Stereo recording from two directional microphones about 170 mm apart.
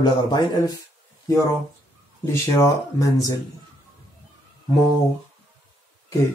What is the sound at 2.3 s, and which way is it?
Speech, 20° left (ahead or behind).